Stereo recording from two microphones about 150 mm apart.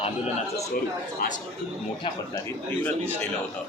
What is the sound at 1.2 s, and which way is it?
Speech, 75° left (ahead or behind).